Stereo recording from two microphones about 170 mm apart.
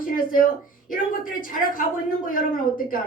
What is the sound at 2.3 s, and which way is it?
Speech, 55° left (ahead or behind).